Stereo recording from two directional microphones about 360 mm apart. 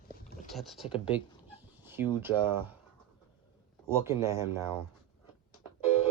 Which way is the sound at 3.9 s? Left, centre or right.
Centre.